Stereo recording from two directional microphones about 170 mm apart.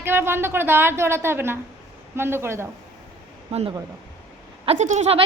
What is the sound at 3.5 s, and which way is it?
Speech, 40° right (ahead or behind).